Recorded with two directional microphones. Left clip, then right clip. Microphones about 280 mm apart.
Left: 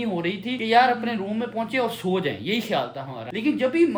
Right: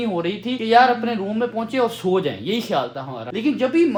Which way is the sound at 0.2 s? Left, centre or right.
Centre.